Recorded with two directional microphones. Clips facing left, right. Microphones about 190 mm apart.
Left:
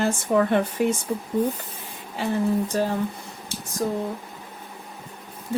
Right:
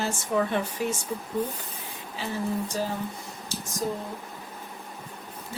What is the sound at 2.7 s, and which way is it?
Speech, 60° left (ahead or behind).